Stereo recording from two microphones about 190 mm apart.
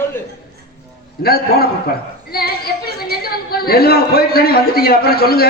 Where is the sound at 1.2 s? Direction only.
55° left (ahead or behind).